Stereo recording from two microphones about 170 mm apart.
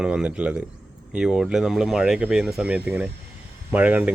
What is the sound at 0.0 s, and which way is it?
Speech, 5° right (ahead or behind).